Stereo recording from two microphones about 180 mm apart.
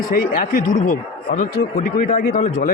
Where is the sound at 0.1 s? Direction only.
50° left (ahead or behind).